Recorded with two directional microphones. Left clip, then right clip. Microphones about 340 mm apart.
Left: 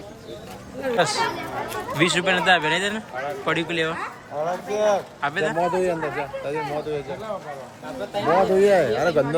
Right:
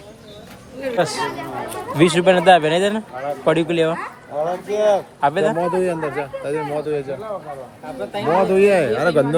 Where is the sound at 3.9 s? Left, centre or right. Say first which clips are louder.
Right 4 dB; right.